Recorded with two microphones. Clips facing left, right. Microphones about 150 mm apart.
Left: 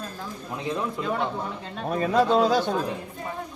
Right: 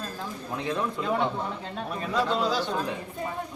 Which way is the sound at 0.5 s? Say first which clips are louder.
Left 1 dB; 10° left (ahead or behind).